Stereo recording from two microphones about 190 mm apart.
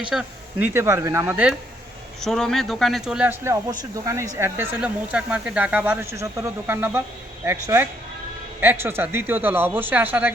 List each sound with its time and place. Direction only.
0.0 s speech: 5° right (ahead or behind)
2.2 s speech: centre (ahead or behind)